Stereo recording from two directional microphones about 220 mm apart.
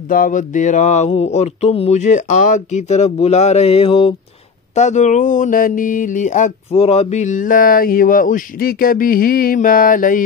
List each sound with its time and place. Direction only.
0.1 s speech: 40° left (ahead or behind)